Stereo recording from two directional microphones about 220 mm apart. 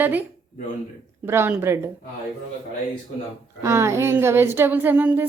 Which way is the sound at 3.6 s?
10° right (ahead or behind).